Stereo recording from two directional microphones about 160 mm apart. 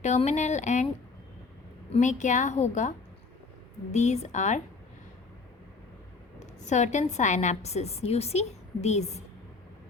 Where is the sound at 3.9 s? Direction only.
45° left (ahead or behind).